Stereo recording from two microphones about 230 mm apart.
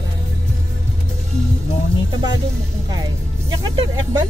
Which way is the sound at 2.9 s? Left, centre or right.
Centre.